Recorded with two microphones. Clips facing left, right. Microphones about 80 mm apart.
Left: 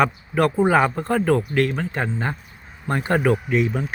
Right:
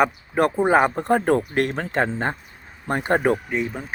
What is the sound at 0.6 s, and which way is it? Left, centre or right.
Speech, right.